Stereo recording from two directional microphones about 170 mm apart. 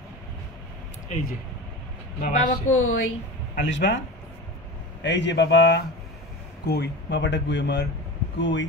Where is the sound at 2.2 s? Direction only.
45° left (ahead or behind).